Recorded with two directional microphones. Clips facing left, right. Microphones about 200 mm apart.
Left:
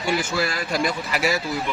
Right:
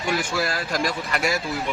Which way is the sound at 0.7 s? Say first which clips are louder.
Left 1 dB; 5° left (ahead or behind).